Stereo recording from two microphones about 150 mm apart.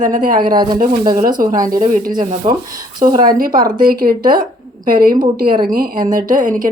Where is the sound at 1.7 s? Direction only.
65° right (ahead or behind).